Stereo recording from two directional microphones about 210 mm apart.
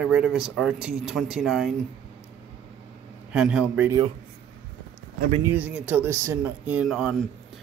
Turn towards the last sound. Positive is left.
turn(degrees=0)  # may be behind; listen again after turning